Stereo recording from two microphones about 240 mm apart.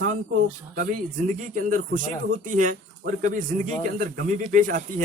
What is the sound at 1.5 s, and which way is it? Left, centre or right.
Speech, right.